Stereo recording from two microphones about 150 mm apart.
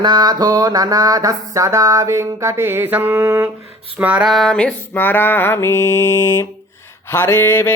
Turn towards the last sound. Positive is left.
turn(degrees=15)  # may be behind; listen again after turning